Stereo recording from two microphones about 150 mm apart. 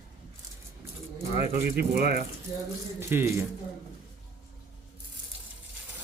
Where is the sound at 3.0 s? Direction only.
15° right (ahead or behind).